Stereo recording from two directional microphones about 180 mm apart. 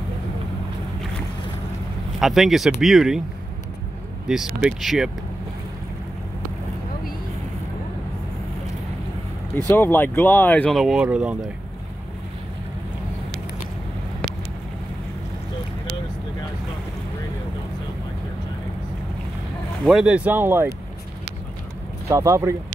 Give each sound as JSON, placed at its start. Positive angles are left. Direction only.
{"t": 2.1, "sound": "speech", "side_deg": 0}
{"t": 4.3, "sound": "speech", "side_deg": -5}
{"t": 9.7, "sound": "speech", "side_deg": 10}
{"t": 19.9, "sound": "speech", "side_deg": -5}
{"t": 22.0, "sound": "speech", "side_deg": -15}